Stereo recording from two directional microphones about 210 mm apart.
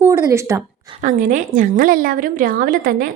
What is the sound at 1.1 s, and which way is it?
A woman's voice, 40° right (ahead or behind).